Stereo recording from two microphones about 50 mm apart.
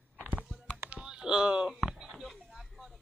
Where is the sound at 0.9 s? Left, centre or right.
Centre.